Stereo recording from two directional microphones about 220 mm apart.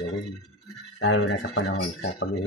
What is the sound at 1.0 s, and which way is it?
Speech, 65° left (ahead or behind).